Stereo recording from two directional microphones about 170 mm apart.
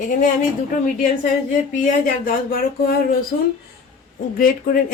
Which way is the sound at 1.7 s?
50° left (ahead or behind).